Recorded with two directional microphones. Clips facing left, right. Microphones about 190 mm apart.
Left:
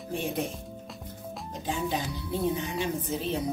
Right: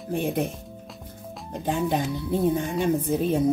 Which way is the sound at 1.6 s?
55° right (ahead or behind).